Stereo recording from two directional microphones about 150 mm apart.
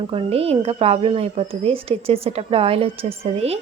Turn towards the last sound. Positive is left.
turn(degrees=-40)  # may be behind; listen again after turning